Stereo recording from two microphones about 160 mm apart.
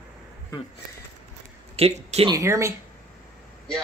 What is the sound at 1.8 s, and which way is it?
Speech, 40° right (ahead or behind).